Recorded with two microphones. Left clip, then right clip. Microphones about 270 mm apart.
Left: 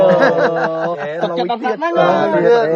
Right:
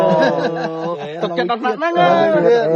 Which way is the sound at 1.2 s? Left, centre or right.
Centre.